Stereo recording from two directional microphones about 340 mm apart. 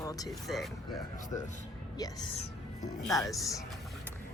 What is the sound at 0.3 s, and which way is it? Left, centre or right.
A woman's voice, centre.